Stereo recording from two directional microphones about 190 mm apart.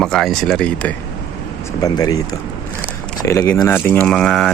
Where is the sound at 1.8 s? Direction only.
20° left (ahead or behind).